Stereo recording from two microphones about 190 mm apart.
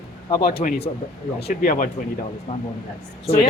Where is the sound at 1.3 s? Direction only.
55° left (ahead or behind).